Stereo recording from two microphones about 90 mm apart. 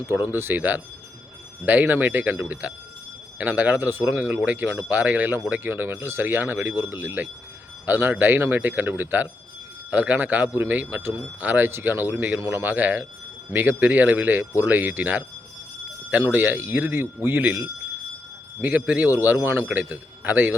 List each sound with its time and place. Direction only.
0.0 s a man's voice: 25° right (ahead or behind)
16.2 s a man's voice: 20° right (ahead or behind)
19.6 s a man's voice: 15° right (ahead or behind)